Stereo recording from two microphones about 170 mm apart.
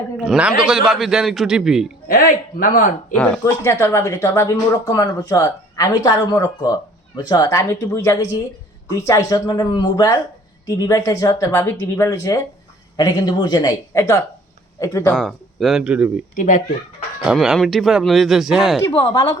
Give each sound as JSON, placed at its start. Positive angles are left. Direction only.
{"t": 0.2, "sound": "a man's voice", "side_deg": -5}
{"t": 2.0, "sound": "a man's voice", "side_deg": 55}
{"t": 3.2, "sound": "speech", "side_deg": 10}
{"t": 15.1, "sound": "speech", "side_deg": 0}
{"t": 16.3, "sound": "a man's voice", "side_deg": 50}
{"t": 17.2, "sound": "speech", "side_deg": 0}
{"t": 18.9, "sound": "speech", "side_deg": 25}